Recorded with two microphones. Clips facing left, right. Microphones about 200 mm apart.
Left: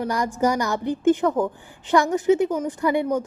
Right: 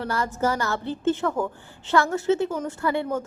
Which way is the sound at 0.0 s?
15° left (ahead or behind).